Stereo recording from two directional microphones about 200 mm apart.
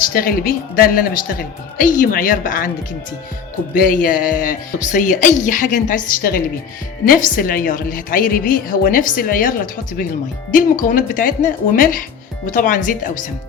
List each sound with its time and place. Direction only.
0.1 s speech: 45° left (ahead or behind)
3.8 s speech: 45° left (ahead or behind)